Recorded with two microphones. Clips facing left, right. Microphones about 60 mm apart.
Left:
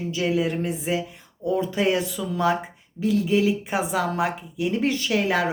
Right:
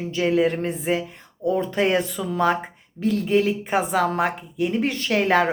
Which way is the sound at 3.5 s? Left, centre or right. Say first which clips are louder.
Right 2 dB; right.